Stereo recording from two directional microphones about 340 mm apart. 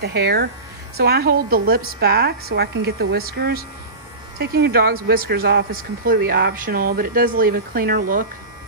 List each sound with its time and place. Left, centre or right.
0.0 s speech: right